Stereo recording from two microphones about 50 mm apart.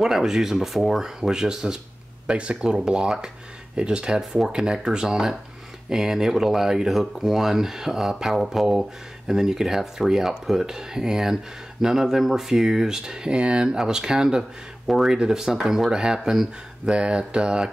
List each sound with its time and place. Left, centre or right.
0.0 s speech: centre
4.2 s speech: centre